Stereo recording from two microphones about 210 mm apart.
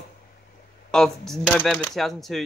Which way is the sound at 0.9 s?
Centre (ahead or behind).